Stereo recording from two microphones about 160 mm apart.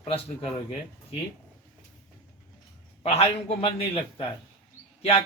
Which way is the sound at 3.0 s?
40° left (ahead or behind).